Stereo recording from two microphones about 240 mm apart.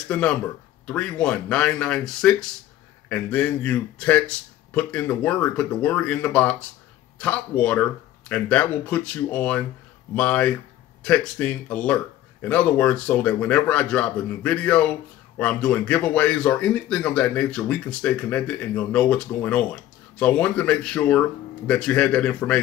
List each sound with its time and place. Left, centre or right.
0.1 s speech: centre